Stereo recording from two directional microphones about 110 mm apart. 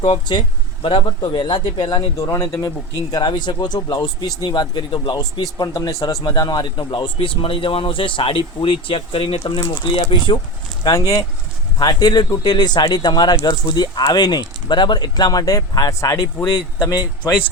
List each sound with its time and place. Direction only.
0.3 s speech: 50° left (ahead or behind)
2.2 s speech: 30° left (ahead or behind); by 9.4 s 55° left (ahead or behind)
9.4 s speech: 35° left (ahead or behind)
10.8 s speech: 35° left (ahead or behind)
16.5 s speech: 45° left (ahead or behind)